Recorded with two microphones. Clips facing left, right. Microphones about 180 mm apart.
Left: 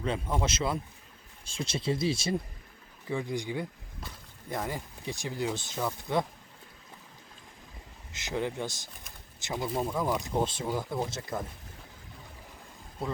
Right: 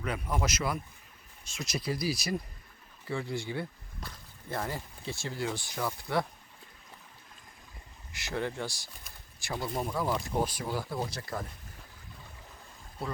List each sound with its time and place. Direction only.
0.0 s speech: 25° left (ahead or behind)
8.1 s speech: 20° left (ahead or behind)